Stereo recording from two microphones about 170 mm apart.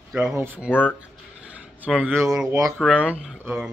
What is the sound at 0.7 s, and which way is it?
Speech, 10° left (ahead or behind).